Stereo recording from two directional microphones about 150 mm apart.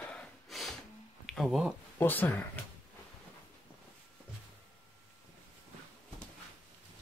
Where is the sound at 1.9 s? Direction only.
10° left (ahead or behind).